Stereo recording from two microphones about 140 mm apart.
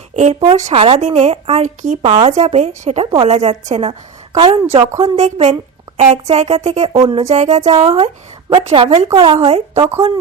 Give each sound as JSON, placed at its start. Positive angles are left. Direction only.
{"t": 0.5, "sound": "a woman's voice", "side_deg": -50}
{"t": 4.9, "sound": "speech", "side_deg": -55}